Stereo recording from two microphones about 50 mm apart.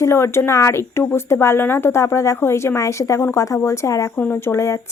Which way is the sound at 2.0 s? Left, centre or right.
Left.